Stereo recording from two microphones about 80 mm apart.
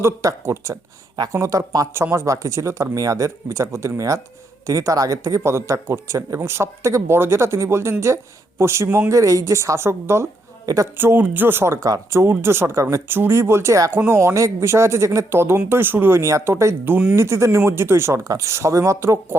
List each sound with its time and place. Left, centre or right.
0.0 s speech: right
1.9 s speech: right